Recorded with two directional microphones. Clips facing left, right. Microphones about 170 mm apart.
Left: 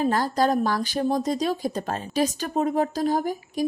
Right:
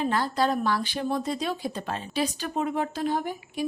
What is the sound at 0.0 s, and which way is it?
Speech, 40° left (ahead or behind).